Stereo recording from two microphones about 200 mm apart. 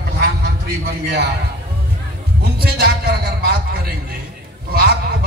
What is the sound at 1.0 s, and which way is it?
Speech, 55° right (ahead or behind).